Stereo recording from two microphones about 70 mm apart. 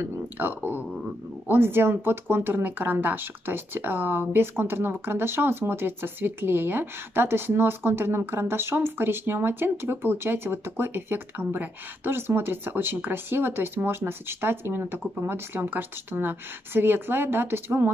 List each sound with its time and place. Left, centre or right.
0.0 s speech: right